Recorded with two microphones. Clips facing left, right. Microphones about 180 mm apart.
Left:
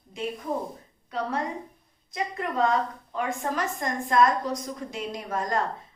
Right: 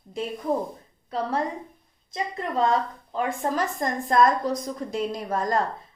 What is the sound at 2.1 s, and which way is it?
A woman's voice, 30° right (ahead or behind).